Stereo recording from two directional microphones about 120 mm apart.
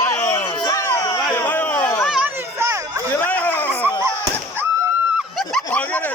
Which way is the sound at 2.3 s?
20° right (ahead or behind).